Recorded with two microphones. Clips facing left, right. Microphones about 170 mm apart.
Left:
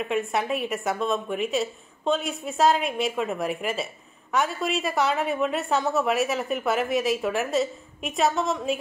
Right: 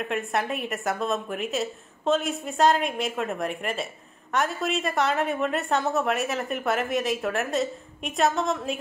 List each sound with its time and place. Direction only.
0.0 s a woman's voice: centre (ahead or behind)